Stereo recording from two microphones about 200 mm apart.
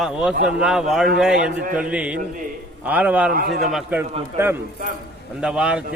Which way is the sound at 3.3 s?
50° right (ahead or behind).